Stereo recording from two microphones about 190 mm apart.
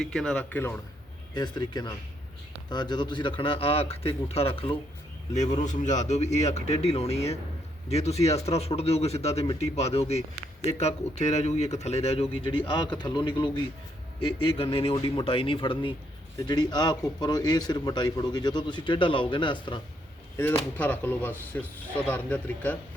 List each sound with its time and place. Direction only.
0.0 s speech: centre (ahead or behind)
1.4 s a man's voice: 20° left (ahead or behind)
20.3 s speech: 10° left (ahead or behind)